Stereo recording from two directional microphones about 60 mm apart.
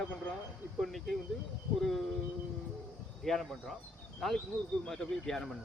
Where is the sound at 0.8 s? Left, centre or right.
Centre.